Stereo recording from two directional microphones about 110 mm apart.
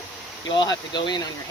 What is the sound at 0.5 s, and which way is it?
Speech, 45° left (ahead or behind).